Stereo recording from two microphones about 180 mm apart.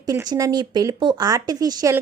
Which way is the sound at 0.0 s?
20° right (ahead or behind).